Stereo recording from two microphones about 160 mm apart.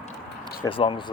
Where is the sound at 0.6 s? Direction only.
30° left (ahead or behind).